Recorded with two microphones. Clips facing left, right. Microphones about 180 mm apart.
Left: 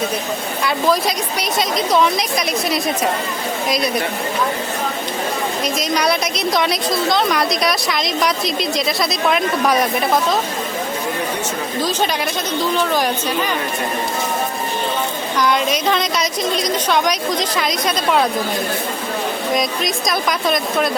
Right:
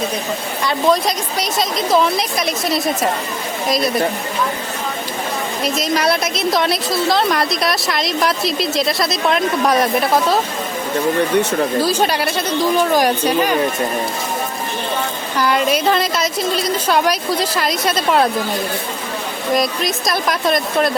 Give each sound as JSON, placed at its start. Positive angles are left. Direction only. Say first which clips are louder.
{"t": 0.9, "sound": "a woman's voice", "louder": "right 3 dB", "side_deg": 0}
{"t": 5.6, "sound": "a woman's voice", "louder": "right 2 dB", "side_deg": 0}
{"t": 11.8, "sound": "a woman's voice", "louder": "right 3 dB", "side_deg": -10}
{"t": 15.4, "sound": "a woman's voice", "louder": "right 2 dB", "side_deg": -5}
{"t": 19.5, "sound": "a woman's voice", "louder": "right 1 dB", "side_deg": 0}